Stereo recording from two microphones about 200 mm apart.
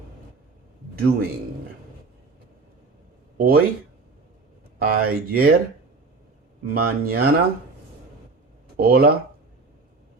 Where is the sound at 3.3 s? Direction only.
50° right (ahead or behind).